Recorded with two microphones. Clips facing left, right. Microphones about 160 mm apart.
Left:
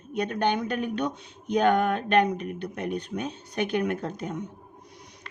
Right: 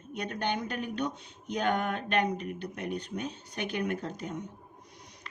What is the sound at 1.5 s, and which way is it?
A woman's voice, 60° left (ahead or behind).